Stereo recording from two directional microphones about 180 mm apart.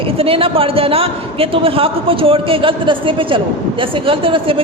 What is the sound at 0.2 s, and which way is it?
A man's voice, 30° right (ahead or behind).